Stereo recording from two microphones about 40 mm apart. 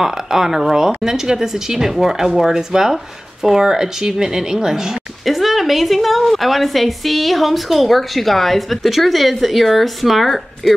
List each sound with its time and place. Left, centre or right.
0.0 s speech: centre
5.2 s a woman's voice: centre